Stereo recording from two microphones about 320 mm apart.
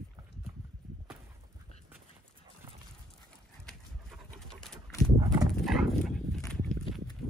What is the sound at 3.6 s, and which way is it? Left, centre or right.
Pigeon, centre.